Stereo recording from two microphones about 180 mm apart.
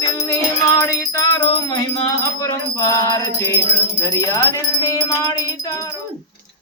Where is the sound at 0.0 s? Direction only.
20° left (ahead or behind).